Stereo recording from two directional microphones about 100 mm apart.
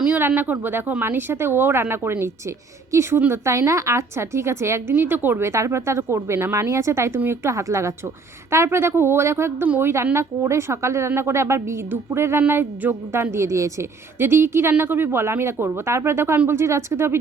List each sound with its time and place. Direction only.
0.2 s a woman's voice: 20° right (ahead or behind)